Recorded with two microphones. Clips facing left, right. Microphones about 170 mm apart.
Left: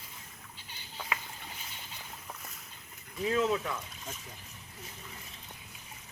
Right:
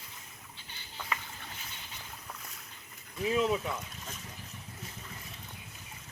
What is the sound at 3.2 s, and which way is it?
Speech, 15° right (ahead or behind).